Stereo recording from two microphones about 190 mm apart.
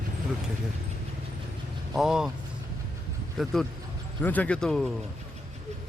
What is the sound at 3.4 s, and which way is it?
Speech, centre (ahead or behind).